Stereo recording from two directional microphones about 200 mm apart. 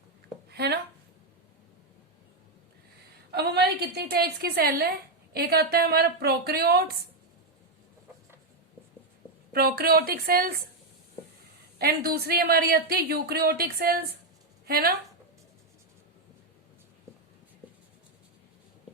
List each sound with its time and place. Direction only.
0.5 s a sound: 55° right (ahead or behind)
3.3 s a woman's voice: 55° right (ahead or behind)
9.5 s a woman's voice: 50° right (ahead or behind)
11.8 s a woman's voice: 50° right (ahead or behind)